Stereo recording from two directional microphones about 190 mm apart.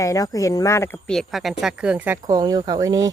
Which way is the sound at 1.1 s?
Centre (ahead or behind).